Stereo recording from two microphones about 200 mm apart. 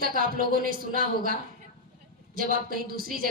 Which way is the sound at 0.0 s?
45° right (ahead or behind).